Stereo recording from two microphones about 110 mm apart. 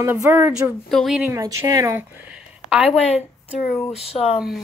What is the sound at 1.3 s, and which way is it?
Speech, 30° right (ahead or behind).